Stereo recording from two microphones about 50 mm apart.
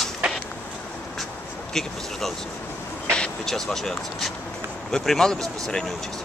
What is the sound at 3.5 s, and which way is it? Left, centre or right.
Speech, centre.